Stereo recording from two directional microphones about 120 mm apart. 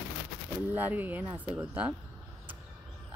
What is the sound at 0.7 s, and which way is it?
Speech, 15° right (ahead or behind).